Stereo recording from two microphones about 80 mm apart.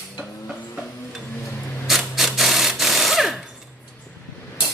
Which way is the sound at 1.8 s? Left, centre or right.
Centre.